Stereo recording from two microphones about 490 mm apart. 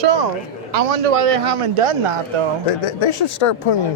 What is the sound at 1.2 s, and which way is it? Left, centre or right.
Speech, right.